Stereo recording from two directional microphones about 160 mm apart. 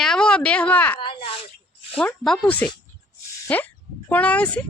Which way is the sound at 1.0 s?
35° left (ahead or behind).